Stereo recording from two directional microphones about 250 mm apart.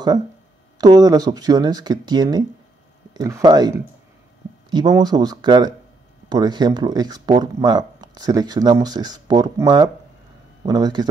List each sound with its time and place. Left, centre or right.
0.7 s speech: centre